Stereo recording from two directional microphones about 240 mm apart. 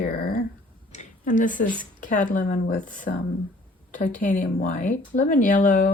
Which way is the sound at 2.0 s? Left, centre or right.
Left.